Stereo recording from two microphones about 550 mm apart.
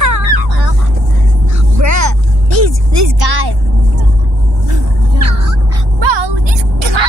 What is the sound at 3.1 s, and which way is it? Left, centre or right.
Vehicle, right.